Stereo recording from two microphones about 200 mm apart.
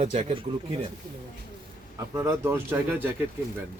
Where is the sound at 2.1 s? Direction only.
15° right (ahead or behind).